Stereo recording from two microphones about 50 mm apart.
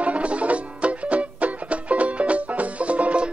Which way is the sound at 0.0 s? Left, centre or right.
Right.